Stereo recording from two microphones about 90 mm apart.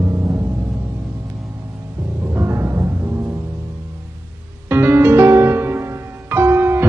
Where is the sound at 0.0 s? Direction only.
30° right (ahead or behind).